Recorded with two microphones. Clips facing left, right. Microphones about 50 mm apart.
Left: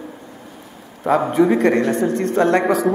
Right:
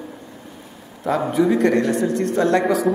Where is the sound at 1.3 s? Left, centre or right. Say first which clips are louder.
Even; left.